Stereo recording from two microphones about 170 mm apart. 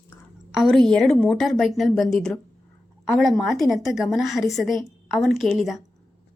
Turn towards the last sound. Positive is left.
turn(degrees=0)  # may be behind; listen again after turning